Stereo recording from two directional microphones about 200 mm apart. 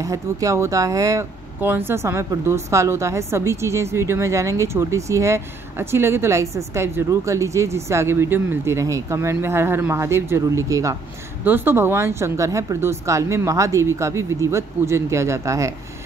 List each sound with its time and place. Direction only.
0.0 s speech: 15° right (ahead or behind)